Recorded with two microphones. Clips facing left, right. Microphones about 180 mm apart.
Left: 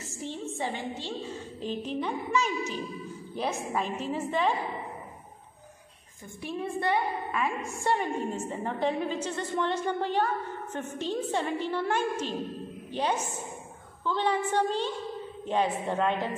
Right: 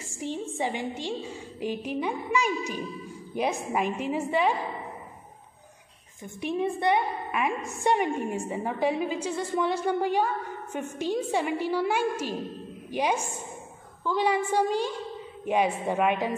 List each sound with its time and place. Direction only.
0.1 s a woman's voice: 15° right (ahead or behind)
6.4 s a woman's voice: 20° right (ahead or behind)